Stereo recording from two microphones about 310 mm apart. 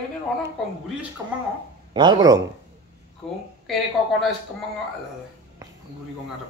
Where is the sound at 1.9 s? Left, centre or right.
Centre.